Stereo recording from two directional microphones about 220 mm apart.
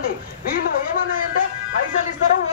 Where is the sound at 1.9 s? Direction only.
35° left (ahead or behind).